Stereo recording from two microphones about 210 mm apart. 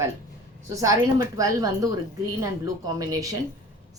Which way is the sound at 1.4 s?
15° right (ahead or behind).